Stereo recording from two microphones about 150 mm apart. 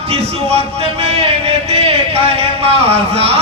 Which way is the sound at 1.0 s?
45° right (ahead or behind).